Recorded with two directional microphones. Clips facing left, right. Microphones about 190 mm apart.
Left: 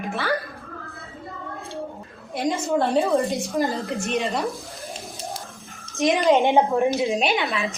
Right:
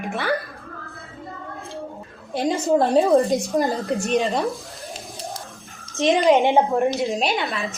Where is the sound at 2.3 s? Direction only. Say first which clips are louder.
Right 3 dB; 35° right (ahead or behind).